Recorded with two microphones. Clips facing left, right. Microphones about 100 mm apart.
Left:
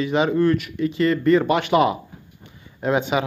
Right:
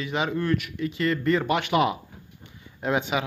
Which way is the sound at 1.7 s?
25° left (ahead or behind).